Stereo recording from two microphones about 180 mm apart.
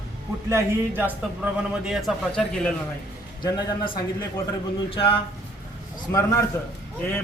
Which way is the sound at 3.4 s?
25° left (ahead or behind).